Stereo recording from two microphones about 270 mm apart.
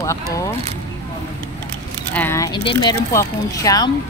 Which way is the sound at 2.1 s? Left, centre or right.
Centre.